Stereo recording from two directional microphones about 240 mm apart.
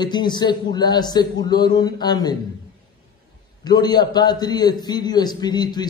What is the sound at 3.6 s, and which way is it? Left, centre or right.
A man's voice, centre.